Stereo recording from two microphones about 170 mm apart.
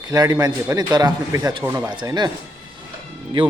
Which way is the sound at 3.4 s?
30° right (ahead or behind).